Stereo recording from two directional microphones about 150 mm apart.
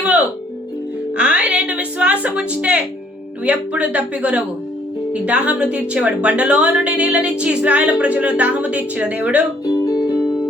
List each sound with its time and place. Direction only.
1.1 s music: 10° right (ahead or behind)
3.4 s a woman's voice: 5° right (ahead or behind)
9.6 s music: 25° left (ahead or behind)